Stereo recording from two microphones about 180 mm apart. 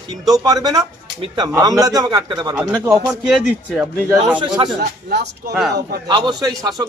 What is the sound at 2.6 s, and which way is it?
Speech, 10° right (ahead or behind).